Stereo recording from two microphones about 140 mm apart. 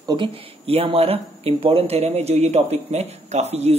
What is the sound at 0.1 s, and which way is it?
Speech, 40° right (ahead or behind).